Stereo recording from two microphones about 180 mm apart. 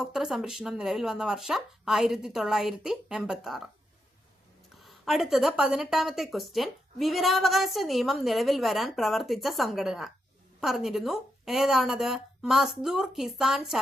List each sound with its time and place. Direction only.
0.0 s a woman's voice: 5° right (ahead or behind)
4.8 s a woman's voice: centre (ahead or behind)